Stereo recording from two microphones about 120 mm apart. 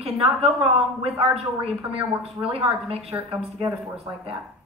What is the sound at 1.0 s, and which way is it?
A woman's voice, 55° right (ahead or behind).